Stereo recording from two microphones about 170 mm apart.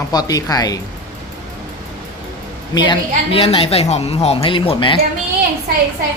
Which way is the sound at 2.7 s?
25° left (ahead or behind).